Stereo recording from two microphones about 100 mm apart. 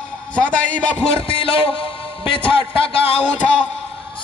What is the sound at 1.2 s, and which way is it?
A man's voice, 65° left (ahead or behind).